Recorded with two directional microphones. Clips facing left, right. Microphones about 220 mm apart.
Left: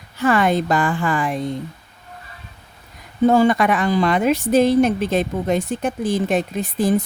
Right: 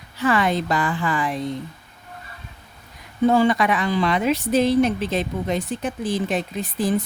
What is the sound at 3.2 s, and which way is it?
Speech, 45° left (ahead or behind).